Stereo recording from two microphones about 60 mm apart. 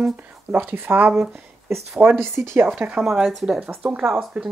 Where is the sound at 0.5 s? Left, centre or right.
Right.